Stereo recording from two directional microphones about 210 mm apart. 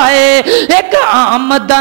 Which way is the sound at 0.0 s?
15° right (ahead or behind).